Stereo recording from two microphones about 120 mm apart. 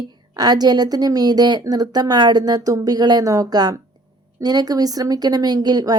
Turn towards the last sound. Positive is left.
turn(degrees=-35)  # may be behind; listen again after turning